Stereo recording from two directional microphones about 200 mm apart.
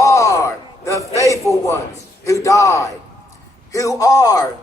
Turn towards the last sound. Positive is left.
turn(degrees=20)  # may be behind; listen again after turning